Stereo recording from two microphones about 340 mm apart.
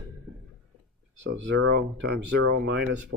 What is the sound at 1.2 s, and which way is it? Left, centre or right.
Speech, right.